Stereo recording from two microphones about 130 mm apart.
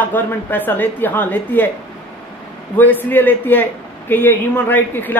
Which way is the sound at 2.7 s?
15° left (ahead or behind).